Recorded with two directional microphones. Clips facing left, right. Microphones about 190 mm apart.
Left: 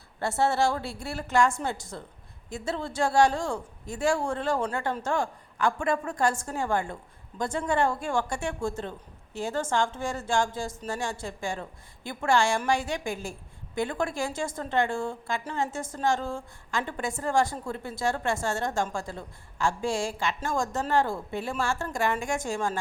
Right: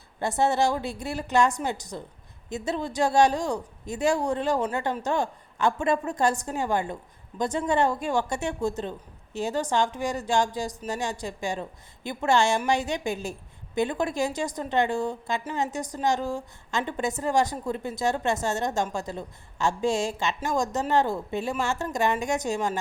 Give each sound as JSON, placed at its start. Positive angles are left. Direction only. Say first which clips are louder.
{"t": 0.2, "sound": "speech", "louder": "right 2 dB", "side_deg": -20}